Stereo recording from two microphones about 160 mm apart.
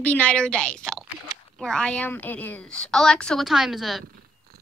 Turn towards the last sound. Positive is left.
turn(degrees=0)  # may be behind; listen again after turning